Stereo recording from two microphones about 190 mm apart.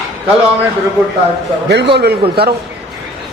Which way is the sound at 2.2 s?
55° right (ahead or behind).